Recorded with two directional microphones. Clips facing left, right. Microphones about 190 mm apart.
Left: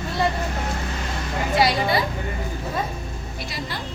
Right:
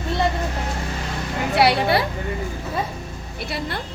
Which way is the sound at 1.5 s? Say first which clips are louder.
Right 3 dB; 65° right (ahead or behind).